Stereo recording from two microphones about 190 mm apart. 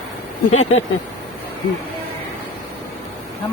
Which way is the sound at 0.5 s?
90° left.